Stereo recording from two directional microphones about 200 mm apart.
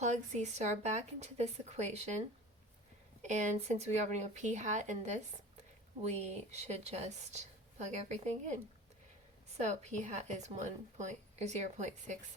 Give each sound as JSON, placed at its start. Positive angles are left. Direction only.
{"t": 0.0, "sound": "a woman's voice", "side_deg": -35}
{"t": 9.6, "sound": "a woman's voice", "side_deg": -35}